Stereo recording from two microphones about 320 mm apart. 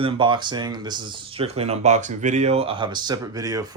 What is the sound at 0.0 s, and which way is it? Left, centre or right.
Speech, centre.